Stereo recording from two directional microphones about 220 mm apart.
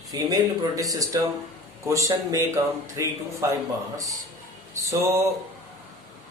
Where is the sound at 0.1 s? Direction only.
15° right (ahead or behind).